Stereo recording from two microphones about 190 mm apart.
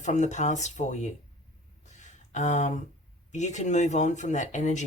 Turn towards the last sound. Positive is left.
turn(degrees=40)  # may be behind; listen again after turning